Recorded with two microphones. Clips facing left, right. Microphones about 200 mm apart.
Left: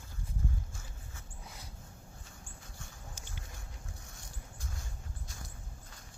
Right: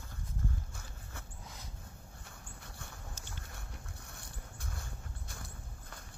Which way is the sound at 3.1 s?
15° left (ahead or behind).